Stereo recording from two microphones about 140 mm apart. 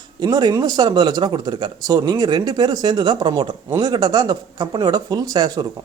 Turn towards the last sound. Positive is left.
turn(degrees=-25)  # may be behind; listen again after turning